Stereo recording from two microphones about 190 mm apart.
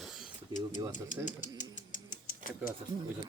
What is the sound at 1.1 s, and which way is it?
Speech, 40° left (ahead or behind).